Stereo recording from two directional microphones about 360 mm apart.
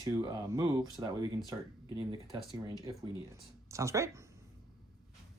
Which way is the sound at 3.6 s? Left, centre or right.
Centre.